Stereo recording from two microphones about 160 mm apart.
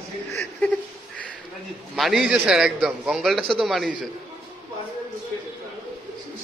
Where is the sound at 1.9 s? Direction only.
Centre (ahead or behind).